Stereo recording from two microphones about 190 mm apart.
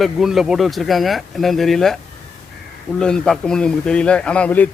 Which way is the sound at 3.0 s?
5° left (ahead or behind).